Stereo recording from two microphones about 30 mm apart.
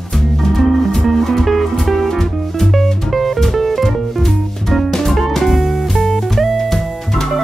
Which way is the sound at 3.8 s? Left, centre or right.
Centre.